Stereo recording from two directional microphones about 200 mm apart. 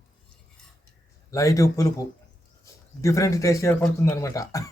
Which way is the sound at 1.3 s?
15° left (ahead or behind).